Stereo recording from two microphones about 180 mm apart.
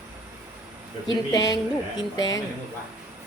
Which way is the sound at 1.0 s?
20° left (ahead or behind).